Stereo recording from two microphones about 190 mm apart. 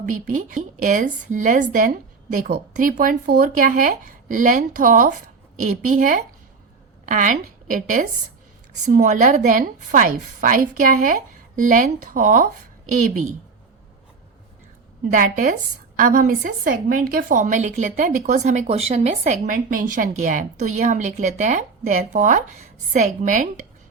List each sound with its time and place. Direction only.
0.3 s a woman's voice: 40° right (ahead or behind)
15.1 s a woman's voice: 45° right (ahead or behind)